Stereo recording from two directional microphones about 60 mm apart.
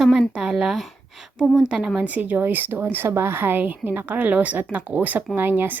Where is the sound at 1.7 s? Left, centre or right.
Centre.